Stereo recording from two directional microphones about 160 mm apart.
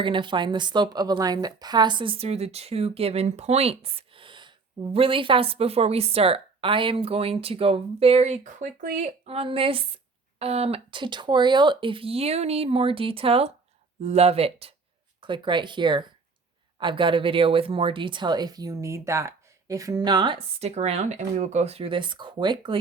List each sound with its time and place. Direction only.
0.0 s speech: 30° right (ahead or behind)